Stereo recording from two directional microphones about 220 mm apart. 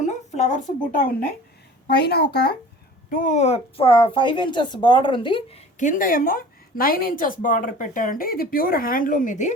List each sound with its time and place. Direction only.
0.0 s speech: 30° left (ahead or behind)
3.1 s a woman's voice: 35° left (ahead or behind)